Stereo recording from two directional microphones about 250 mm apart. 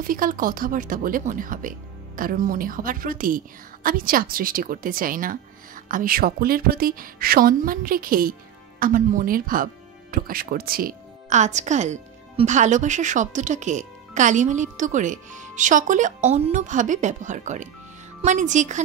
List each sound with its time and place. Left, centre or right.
0.0 s speech: right